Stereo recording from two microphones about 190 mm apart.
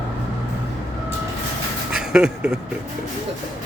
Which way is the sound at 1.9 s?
5° right (ahead or behind).